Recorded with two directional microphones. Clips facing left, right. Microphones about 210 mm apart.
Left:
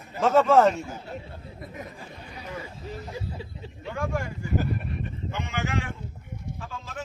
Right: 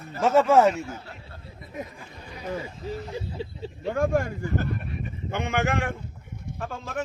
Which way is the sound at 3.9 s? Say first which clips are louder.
Right 6 dB; 45° right (ahead or behind).